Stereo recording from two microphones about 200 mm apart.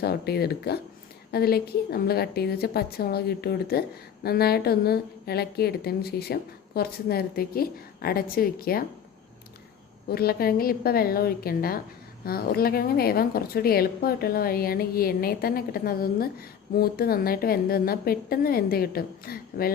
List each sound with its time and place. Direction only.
0.0 s a woman's voice: 50° left (ahead or behind)
10.1 s a woman's voice: 50° left (ahead or behind)